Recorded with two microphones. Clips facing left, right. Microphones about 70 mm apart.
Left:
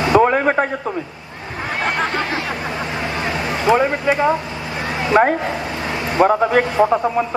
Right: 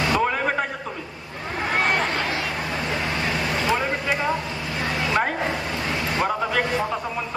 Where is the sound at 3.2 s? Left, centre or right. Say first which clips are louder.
Left 3 dB; left.